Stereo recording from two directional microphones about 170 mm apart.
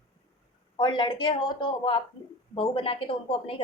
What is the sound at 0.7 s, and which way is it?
A woman's voice, 30° left (ahead or behind).